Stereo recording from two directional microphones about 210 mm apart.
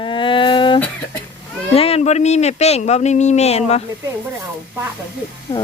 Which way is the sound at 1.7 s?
30° left (ahead or behind).